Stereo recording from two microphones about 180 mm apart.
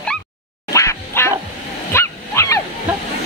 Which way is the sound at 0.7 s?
15° left (ahead or behind).